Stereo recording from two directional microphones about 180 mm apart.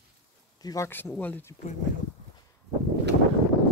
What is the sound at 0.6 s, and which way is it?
Speech, 15° left (ahead or behind).